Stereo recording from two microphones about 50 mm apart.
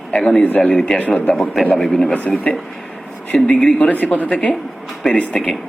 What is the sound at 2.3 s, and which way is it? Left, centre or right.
A man's voice, left.